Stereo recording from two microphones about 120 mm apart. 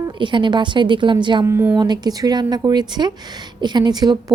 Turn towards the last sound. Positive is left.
turn(degrees=-35)  # may be behind; listen again after turning